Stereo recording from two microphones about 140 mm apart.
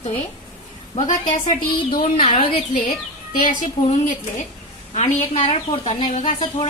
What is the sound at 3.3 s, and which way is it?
Speech, 70° left (ahead or behind).